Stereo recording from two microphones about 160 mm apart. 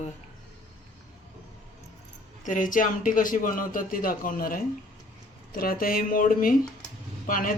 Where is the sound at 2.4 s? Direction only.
55° left (ahead or behind).